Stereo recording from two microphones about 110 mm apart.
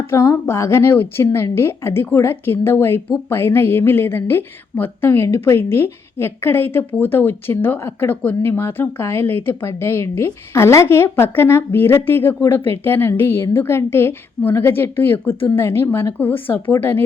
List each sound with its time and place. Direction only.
0.1 s speech: 25° left (ahead or behind)